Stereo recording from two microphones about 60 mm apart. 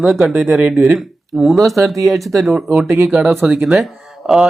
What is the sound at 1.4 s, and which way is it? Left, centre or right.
Speech, centre.